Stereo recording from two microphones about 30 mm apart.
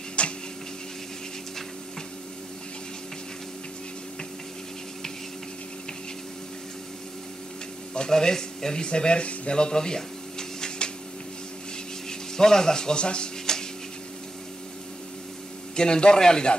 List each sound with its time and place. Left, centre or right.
0.2 s tick-tock: left
8.1 s speech: left
9.5 s speech: left
12.1 s speech: centre
15.7 s speech: left